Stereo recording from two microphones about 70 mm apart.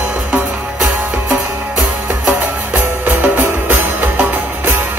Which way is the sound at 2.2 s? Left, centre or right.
Right.